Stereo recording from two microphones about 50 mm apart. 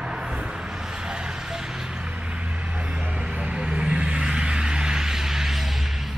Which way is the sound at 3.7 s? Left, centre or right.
Right.